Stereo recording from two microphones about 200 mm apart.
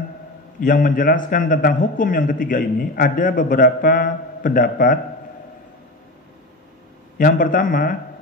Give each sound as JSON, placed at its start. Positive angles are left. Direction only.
{"t": 0.6, "sound": "a man's voice", "side_deg": 45}
{"t": 7.2, "sound": "a man's voice", "side_deg": 45}